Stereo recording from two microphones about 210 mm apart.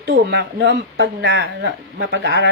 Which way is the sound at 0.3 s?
55° right (ahead or behind).